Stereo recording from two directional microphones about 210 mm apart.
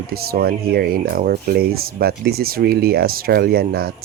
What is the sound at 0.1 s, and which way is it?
Speech, 45° right (ahead or behind).